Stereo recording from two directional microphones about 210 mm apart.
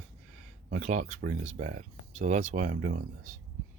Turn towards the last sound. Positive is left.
turn(degrees=-40)  # may be behind; listen again after turning